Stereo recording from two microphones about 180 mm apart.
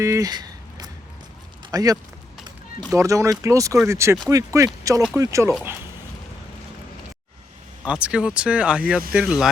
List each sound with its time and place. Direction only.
0.0 s a sound: 15° right (ahead or behind)
1.7 s speech: 20° right (ahead or behind)
7.9 s speech: 5° right (ahead or behind)